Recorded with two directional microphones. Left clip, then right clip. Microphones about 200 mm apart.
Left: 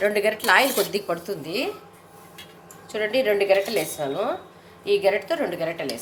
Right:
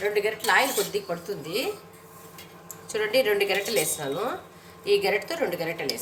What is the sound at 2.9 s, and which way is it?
A woman's voice, 25° left (ahead or behind).